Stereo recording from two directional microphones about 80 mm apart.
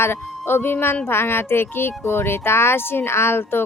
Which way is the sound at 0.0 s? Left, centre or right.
Left.